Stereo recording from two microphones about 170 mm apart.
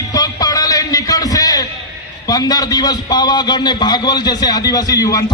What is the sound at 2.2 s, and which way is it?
A man's voice, 20° left (ahead or behind).